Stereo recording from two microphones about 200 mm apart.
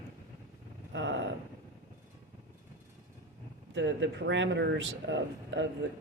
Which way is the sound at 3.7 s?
65° right (ahead or behind).